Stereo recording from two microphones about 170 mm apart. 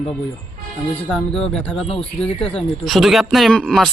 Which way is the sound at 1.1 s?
5° left (ahead or behind).